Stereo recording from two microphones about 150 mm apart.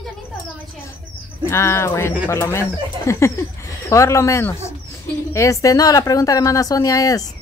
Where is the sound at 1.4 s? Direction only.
20° left (ahead or behind).